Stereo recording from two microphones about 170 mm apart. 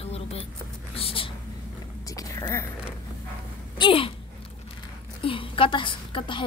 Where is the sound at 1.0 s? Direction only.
30° left (ahead or behind).